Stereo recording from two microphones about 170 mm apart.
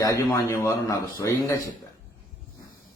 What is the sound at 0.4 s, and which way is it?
Speech, 15° left (ahead or behind).